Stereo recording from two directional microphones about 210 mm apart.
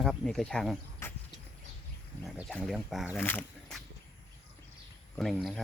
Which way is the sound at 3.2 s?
10° left (ahead or behind).